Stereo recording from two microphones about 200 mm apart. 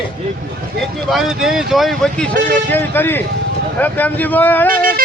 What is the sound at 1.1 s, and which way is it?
Speech, centre (ahead or behind).